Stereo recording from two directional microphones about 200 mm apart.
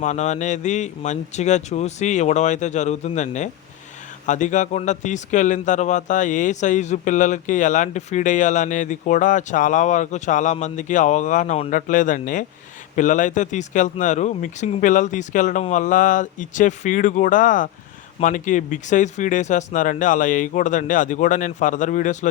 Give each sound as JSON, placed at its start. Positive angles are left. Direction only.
{"t": 0.0, "sound": "a man's voice", "side_deg": 35}